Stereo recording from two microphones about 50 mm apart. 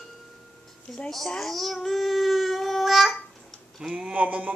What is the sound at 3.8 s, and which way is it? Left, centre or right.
Tick, centre.